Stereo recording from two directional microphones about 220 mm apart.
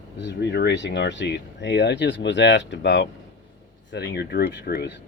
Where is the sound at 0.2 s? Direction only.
50° left (ahead or behind).